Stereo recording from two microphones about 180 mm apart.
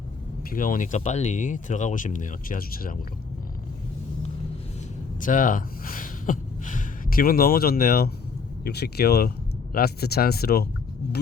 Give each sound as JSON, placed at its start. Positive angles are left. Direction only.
{"t": 0.5, "sound": "speech", "side_deg": 50}
{"t": 5.2, "sound": "speech", "side_deg": 50}